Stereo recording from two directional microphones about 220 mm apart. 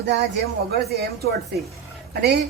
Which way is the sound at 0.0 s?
50° right (ahead or behind).